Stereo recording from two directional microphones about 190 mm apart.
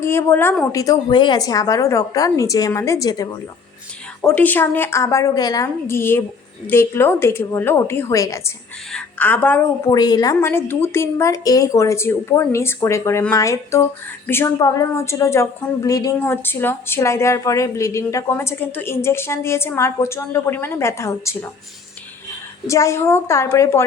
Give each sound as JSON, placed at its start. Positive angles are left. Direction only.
{"t": 0.0, "sound": "a woman's voice", "side_deg": 15}
{"t": 4.2, "sound": "a woman's voice", "side_deg": 10}
{"t": 22.6, "sound": "a woman's voice", "side_deg": 15}